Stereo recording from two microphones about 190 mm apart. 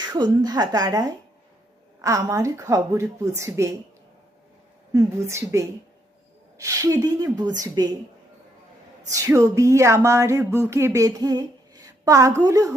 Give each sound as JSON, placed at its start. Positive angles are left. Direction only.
{"t": 0.1, "sound": "a woman's voice", "side_deg": -20}
{"t": 4.9, "sound": "a woman's voice", "side_deg": -15}
{"t": 9.1, "sound": "speech", "side_deg": -15}